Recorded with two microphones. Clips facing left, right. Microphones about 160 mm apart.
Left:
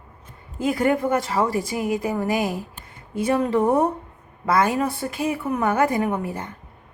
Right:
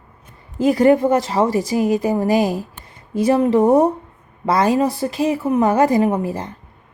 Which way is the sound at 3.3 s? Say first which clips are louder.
Right 5 dB; 20° right (ahead or behind).